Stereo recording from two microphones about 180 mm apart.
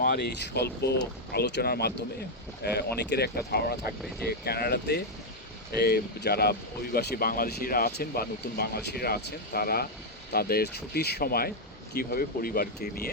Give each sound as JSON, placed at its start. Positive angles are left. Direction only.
{"t": 0.0, "sound": "speech", "side_deg": 65}